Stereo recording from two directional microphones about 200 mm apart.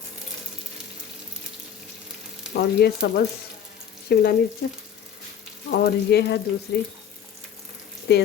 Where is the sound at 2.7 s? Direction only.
55° left (ahead or behind).